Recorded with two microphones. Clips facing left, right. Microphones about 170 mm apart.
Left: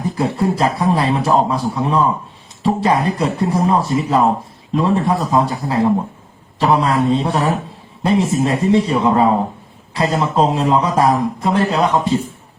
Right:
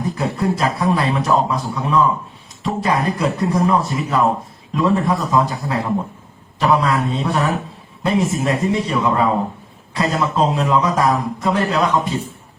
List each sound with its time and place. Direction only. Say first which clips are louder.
0.2 s a man's voice: left 4 dB; 30° left (ahead or behind)